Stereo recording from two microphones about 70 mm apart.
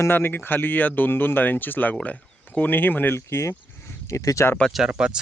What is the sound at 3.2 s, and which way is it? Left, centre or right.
Speech, left.